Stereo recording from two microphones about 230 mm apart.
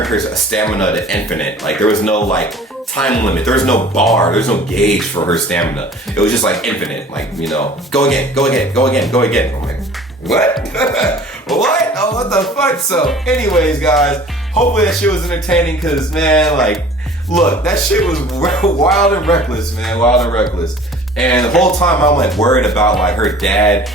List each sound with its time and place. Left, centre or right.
0.0 s speech: centre
10.3 s speech: centre
11.9 s speech: centre
12.4 s speech: centre
20.2 s speech: centre
23.2 s speech: centre